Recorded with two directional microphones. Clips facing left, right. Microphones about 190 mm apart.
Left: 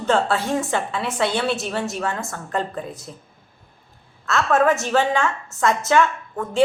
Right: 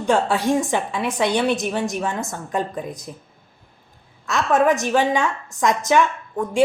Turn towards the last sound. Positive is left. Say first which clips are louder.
# right 1 dB
turn(degrees=-15)  # may be behind; listen again after turning